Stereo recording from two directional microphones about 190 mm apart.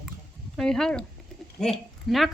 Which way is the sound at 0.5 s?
5° left (ahead or behind).